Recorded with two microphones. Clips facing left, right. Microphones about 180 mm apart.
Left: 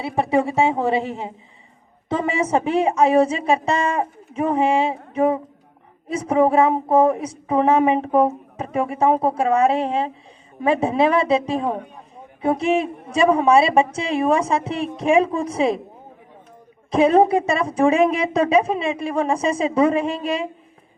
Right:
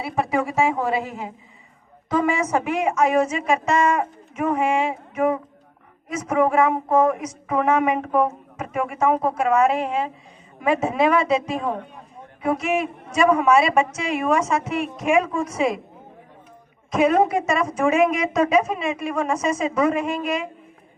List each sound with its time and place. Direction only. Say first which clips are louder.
0.0 s a woman's voice: left 3 dB; 30° left (ahead or behind)
16.9 s speech: left 3 dB; 30° left (ahead or behind)